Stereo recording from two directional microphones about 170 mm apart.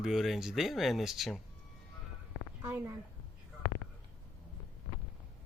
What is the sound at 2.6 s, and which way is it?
Speech, 15° right (ahead or behind).